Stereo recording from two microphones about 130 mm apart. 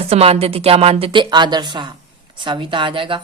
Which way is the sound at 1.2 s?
35° right (ahead or behind).